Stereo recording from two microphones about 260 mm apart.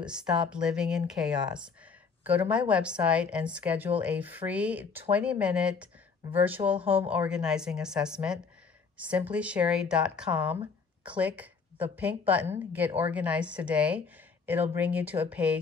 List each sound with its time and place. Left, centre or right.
0.0 s a woman's voice: centre